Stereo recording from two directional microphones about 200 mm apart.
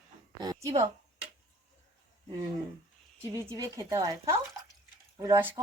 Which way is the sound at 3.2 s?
15° right (ahead or behind).